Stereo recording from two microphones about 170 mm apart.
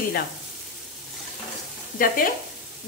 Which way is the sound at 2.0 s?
55° left (ahead or behind).